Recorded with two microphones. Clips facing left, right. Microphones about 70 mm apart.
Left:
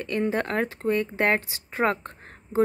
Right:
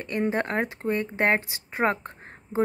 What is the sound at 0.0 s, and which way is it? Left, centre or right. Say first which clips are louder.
A woman's voice: even; right.